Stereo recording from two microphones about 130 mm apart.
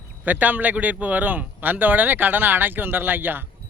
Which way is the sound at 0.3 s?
15° right (ahead or behind).